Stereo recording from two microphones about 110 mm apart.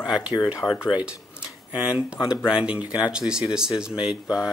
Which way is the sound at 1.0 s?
10° right (ahead or behind).